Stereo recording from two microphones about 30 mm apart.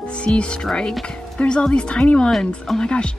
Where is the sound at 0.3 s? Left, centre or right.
Left.